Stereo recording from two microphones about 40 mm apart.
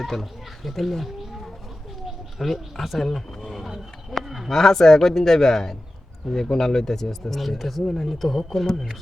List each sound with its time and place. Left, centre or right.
0.0 s speech: centre
3.0 s a sound: centre
4.2 s speech: centre
4.5 s speech: centre